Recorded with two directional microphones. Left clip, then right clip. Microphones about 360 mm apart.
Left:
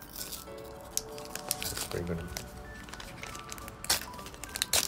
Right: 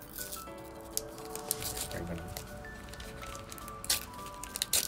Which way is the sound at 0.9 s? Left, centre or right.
Centre.